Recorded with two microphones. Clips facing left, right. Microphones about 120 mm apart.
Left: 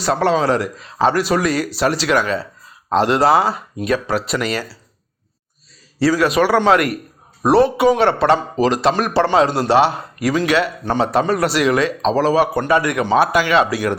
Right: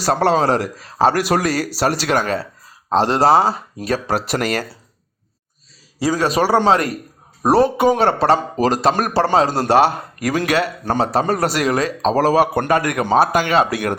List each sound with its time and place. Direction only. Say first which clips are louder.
0.0 s speech: right 1 dB; 40° right (ahead or behind)
6.1 s a man's voice: right 1 dB; 35° right (ahead or behind); by 13.9 s 50° right (ahead or behind)